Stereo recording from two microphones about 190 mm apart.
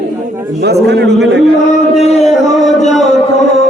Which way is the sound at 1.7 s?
35° left (ahead or behind).